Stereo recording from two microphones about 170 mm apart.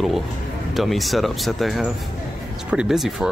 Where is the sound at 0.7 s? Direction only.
Centre (ahead or behind).